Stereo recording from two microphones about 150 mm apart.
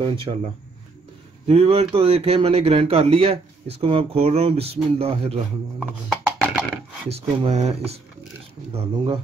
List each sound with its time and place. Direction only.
0.0 s a man's voice: 35° right (ahead or behind)
1.5 s a man's voice: 40° right (ahead or behind)
6.3 s a sound: centre (ahead or behind)
7.1 s a man's voice: 45° right (ahead or behind)